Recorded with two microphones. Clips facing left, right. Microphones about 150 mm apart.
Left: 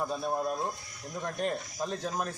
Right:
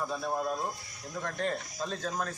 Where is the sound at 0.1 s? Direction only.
15° left (ahead or behind).